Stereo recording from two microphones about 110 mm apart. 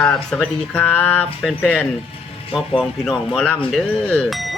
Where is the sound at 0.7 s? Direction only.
15° left (ahead or behind).